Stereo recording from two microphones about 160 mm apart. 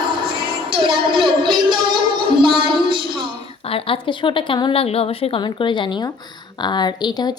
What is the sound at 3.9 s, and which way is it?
A woman's voice, 30° left (ahead or behind).